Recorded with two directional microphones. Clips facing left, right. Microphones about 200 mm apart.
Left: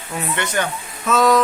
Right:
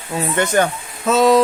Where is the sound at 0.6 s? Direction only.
45° right (ahead or behind).